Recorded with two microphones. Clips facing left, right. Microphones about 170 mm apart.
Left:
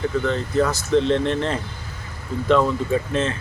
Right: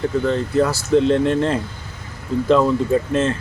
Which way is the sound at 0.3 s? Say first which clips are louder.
Right 3 dB; 30° right (ahead or behind).